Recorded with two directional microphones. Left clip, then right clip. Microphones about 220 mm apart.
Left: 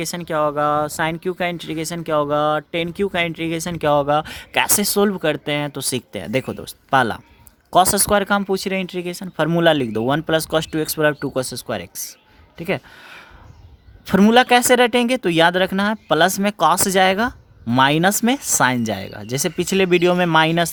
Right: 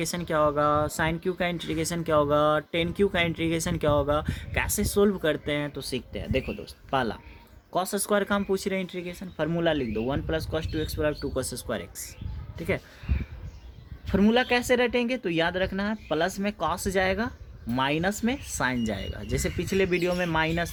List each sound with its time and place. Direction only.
0.0 s speech: 35° left (ahead or behind)
14.0 s speech: 50° left (ahead or behind)